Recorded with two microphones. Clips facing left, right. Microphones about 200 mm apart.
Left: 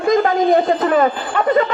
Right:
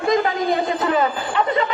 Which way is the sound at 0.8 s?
50° left (ahead or behind).